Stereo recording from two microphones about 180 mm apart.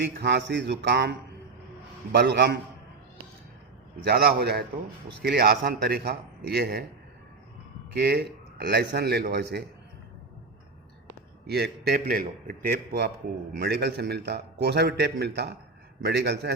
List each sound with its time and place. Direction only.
0.2 s a man's voice: 70° right (ahead or behind)
2.1 s a man's voice: 70° right (ahead or behind)
4.0 s a man's voice: 60° right (ahead or behind)
7.9 s a man's voice: 60° right (ahead or behind)
11.4 s a man's voice: 60° right (ahead or behind)